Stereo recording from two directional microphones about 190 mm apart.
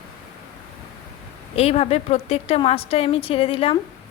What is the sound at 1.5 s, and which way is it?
A woman's voice, 30° left (ahead or behind).